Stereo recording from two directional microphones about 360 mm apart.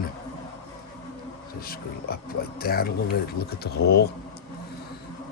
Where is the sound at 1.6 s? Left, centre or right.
Left.